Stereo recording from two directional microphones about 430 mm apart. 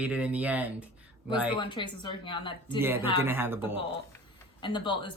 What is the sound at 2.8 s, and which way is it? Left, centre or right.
Speech, centre.